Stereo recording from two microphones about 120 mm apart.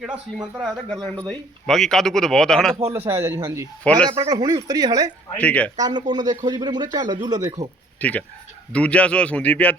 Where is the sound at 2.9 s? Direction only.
20° right (ahead or behind).